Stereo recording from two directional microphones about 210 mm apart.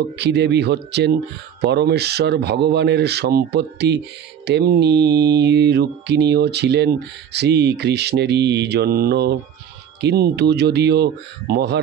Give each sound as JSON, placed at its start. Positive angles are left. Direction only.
{"t": 0.2, "sound": "mantra", "side_deg": -55}